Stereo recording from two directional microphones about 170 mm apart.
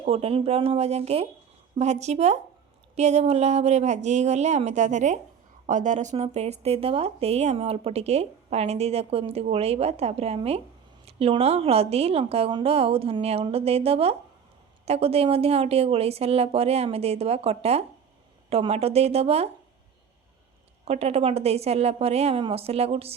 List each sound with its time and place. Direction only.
0.0 s speech: 35° right (ahead or behind)
20.8 s speech: 35° right (ahead or behind)